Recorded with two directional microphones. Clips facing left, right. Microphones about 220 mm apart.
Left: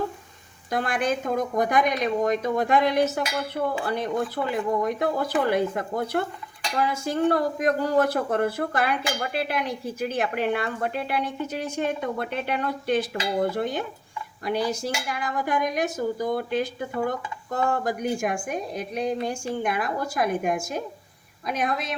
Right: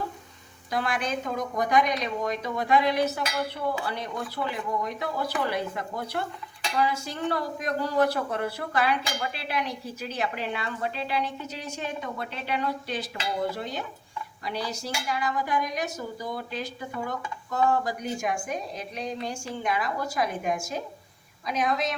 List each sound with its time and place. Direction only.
0.7 s speech: 50° left (ahead or behind)